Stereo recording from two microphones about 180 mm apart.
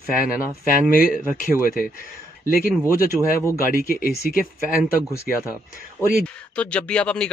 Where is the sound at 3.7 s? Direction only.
55° left (ahead or behind).